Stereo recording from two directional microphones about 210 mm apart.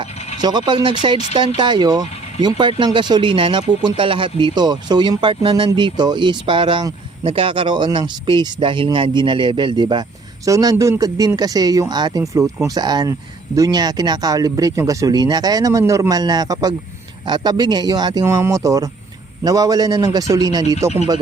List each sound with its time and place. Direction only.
0.4 s speech: 20° right (ahead or behind)